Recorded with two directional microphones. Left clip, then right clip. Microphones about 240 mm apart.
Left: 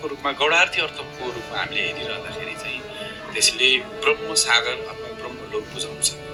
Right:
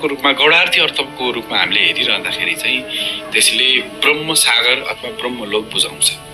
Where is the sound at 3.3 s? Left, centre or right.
Right.